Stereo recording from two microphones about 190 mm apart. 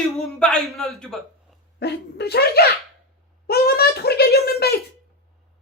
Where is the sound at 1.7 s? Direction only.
60° left (ahead or behind).